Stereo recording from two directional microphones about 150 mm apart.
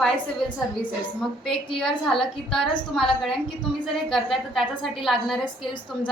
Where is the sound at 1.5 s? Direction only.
Centre (ahead or behind).